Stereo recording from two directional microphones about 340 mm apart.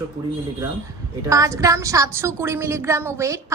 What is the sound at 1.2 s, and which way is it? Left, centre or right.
A woman's voice, centre.